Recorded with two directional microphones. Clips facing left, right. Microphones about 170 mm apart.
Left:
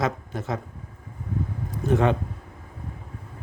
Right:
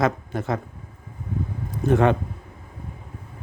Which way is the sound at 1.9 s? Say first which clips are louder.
Right 3 dB; 60° right (ahead or behind).